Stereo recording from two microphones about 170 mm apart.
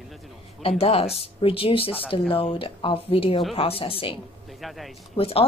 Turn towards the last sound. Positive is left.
turn(degrees=35)  # may be behind; listen again after turning